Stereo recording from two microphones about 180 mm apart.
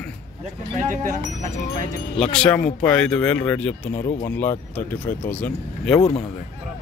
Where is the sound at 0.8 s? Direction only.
45° right (ahead or behind).